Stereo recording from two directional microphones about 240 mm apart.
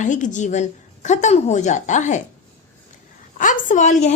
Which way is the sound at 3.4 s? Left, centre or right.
Left.